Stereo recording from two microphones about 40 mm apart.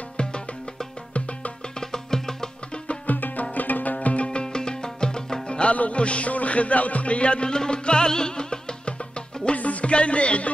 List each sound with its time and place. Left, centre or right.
0.2 s music: left
1.8 s music: centre
3.1 s music: left
9.6 s music: left